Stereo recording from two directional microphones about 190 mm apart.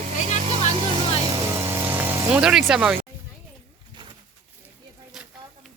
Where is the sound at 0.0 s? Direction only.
35° right (ahead or behind).